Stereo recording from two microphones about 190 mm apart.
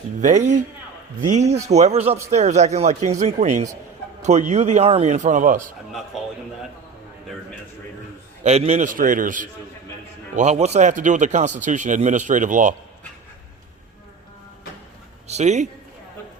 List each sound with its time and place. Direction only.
0.2 s speech: 40° right (ahead or behind)
6.1 s a sound: centre (ahead or behind)
8.4 s a man's voice: 35° right (ahead or behind)
15.3 s speech: 35° right (ahead or behind)